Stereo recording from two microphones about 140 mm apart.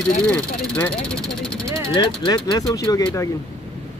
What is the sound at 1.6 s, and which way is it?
Speech, 25° right (ahead or behind).